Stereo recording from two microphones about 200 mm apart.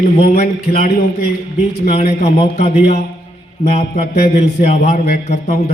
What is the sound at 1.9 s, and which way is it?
A man's voice, 30° left (ahead or behind).